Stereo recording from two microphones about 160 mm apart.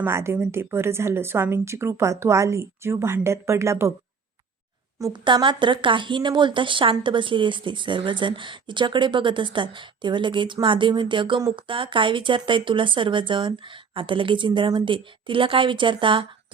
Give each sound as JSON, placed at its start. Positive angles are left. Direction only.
{"t": 0.0, "sound": "a woman's voice", "side_deg": -15}
{"t": 4.9, "sound": "speech", "side_deg": -25}